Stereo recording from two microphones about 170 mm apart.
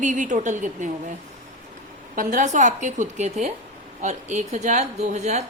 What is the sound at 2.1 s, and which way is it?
A woman's voice, 50° right (ahead or behind).